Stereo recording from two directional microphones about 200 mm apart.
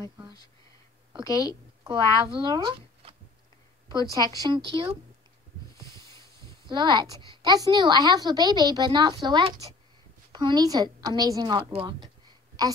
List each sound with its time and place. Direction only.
1.2 s a woman's voice: 15° left (ahead or behind)
2.2 s a woman's voice: 25° right (ahead or behind)
5.9 s a sound: 15° left (ahead or behind)
6.7 s a woman's voice: 20° right (ahead or behind)